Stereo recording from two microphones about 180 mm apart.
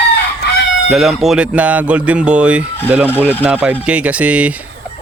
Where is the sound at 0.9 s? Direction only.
Centre (ahead or behind).